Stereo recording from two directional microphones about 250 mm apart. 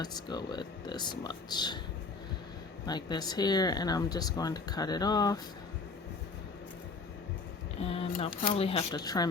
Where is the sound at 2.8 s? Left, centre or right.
Centre.